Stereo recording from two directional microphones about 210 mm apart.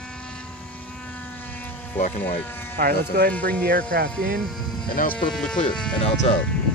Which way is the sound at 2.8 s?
50° right (ahead or behind).